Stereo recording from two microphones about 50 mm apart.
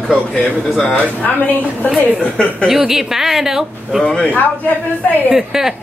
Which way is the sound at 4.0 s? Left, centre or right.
Centre.